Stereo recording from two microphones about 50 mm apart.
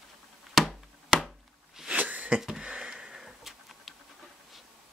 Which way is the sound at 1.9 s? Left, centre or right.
Right.